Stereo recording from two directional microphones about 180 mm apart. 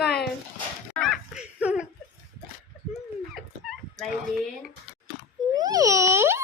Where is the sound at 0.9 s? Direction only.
Centre (ahead or behind).